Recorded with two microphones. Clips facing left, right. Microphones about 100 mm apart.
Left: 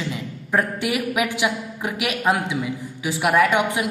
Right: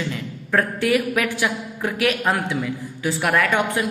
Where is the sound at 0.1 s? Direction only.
15° left (ahead or behind).